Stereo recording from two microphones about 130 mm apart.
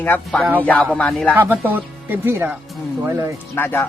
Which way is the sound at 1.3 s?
15° right (ahead or behind).